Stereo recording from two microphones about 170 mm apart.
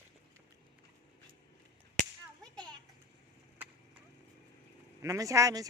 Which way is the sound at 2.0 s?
45° right (ahead or behind).